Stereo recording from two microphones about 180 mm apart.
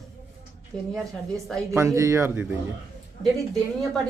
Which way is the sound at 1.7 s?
15° right (ahead or behind).